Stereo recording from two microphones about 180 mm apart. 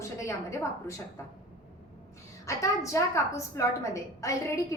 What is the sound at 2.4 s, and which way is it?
A woman's voice, 15° left (ahead or behind).